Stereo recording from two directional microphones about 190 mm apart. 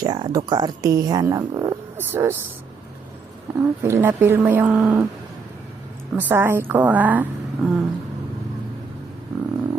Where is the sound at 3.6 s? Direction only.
15° right (ahead or behind).